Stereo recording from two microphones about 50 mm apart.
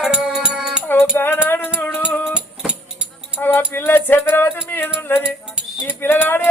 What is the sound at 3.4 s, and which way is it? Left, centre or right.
Music, left.